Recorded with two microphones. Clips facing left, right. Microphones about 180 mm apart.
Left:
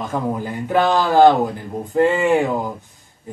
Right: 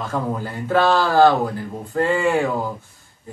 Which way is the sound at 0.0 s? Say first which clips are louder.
Left 2 dB; 15° left (ahead or behind).